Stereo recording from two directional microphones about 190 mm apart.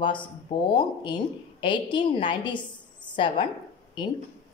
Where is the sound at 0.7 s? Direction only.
25° left (ahead or behind).